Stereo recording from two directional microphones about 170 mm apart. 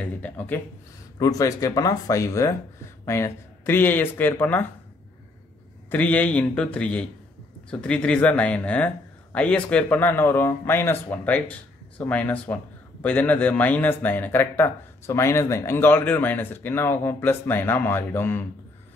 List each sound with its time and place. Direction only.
0.0 s speech: 10° left (ahead or behind)
1.2 s speech: 20° left (ahead or behind)
5.9 s speech: 10° left (ahead or behind)